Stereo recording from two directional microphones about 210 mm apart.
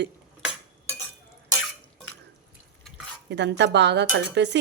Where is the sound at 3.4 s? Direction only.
55° right (ahead or behind).